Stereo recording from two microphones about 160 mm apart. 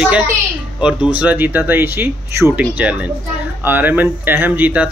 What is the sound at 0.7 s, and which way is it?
Speech, 5° right (ahead or behind).